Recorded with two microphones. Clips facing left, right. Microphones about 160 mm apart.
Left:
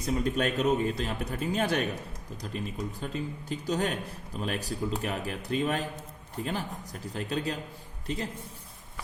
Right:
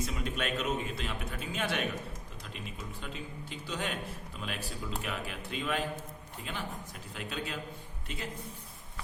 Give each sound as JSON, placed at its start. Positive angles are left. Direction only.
{"t": 0.0, "sound": "a man's voice", "side_deg": 40}